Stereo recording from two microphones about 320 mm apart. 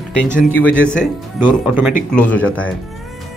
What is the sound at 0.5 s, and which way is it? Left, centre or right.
Speech, centre.